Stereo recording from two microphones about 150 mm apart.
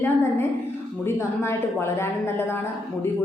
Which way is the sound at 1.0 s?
15° left (ahead or behind).